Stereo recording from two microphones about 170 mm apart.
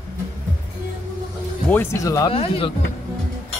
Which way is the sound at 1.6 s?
15° left (ahead or behind).